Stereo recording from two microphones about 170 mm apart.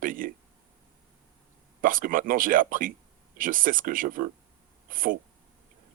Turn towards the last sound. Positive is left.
turn(degrees=-55)  # may be behind; listen again after turning